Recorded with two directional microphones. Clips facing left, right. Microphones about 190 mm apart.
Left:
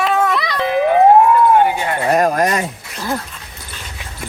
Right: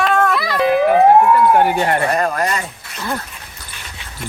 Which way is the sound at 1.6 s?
60° right (ahead or behind).